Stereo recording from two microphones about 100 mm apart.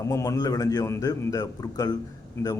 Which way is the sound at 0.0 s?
35° left (ahead or behind).